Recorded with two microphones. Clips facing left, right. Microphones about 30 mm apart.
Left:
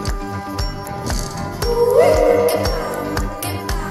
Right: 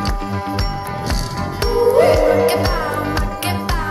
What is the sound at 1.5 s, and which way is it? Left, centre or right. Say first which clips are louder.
Music: even; right.